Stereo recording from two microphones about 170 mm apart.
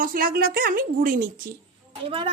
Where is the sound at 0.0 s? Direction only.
55° right (ahead or behind).